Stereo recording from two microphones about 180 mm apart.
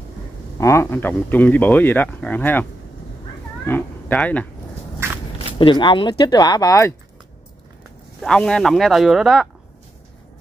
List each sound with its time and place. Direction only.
0.6 s speech: 15° left (ahead or behind)
3.6 s speech: 10° left (ahead or behind)
5.6 s speech: 30° left (ahead or behind)
8.2 s speech: 5° left (ahead or behind)